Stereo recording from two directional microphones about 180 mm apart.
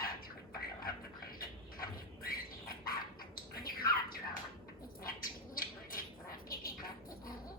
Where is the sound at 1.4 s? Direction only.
55° left (ahead or behind).